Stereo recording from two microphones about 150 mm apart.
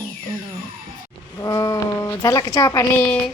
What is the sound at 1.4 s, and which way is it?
Speech, 20° left (ahead or behind).